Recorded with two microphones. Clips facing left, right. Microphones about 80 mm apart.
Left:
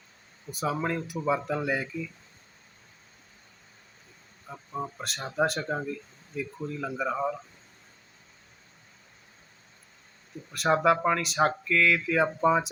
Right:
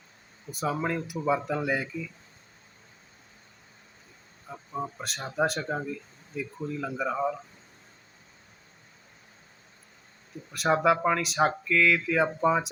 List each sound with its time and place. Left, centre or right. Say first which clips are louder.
0.5 s speech: even; centre
4.4 s speech: right 1 dB; centre
10.5 s speech: even; centre